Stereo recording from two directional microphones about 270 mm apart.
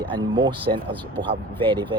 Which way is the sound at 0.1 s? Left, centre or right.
Centre.